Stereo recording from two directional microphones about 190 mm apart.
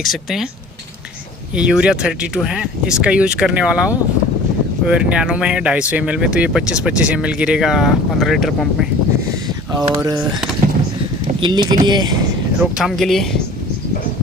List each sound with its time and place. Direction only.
0.0 s speech: centre (ahead or behind)
1.5 s speech: 5° right (ahead or behind)
9.8 s speech: 20° right (ahead or behind)
11.4 s speech: 20° right (ahead or behind)
12.7 s speech: centre (ahead or behind)